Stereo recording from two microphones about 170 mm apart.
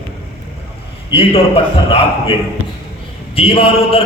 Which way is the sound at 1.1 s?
35° left (ahead or behind).